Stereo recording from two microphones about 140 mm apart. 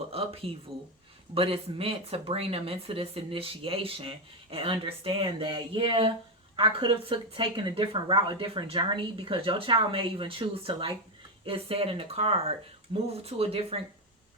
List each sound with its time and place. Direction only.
0.1 s speech: 45° right (ahead or behind)